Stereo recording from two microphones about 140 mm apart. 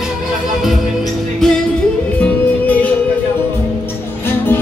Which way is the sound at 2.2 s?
10° left (ahead or behind).